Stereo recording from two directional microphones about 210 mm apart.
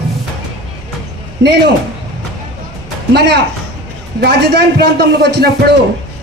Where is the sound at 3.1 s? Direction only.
55° right (ahead or behind).